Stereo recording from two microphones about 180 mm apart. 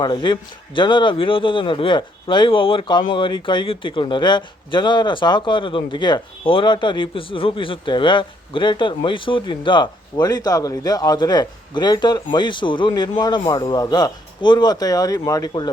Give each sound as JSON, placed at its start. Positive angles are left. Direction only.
{"t": 0.0, "sound": "speech", "side_deg": 25}